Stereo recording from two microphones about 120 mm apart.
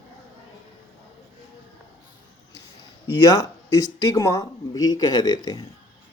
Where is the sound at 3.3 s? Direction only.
30° left (ahead or behind).